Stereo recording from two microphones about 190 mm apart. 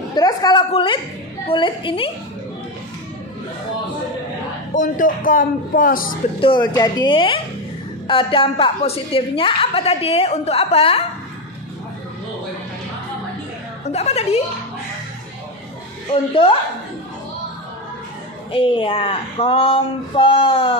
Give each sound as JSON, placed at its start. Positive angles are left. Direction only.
{"t": 0.1, "sound": "a woman's voice", "side_deg": 20}
{"t": 4.7, "sound": "speech", "side_deg": 45}
{"t": 6.4, "sound": "a woman's voice", "side_deg": 25}
{"t": 13.9, "sound": "a woman's voice", "side_deg": 35}
{"t": 16.1, "sound": "speech", "side_deg": 30}
{"t": 18.5, "sound": "speech", "side_deg": 25}